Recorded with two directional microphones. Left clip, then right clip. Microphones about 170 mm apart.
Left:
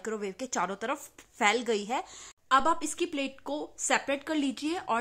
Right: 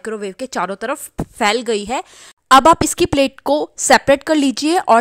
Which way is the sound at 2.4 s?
55° right (ahead or behind).